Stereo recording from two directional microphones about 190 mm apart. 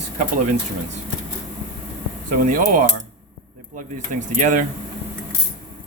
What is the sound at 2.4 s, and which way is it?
Speech, 45° right (ahead or behind).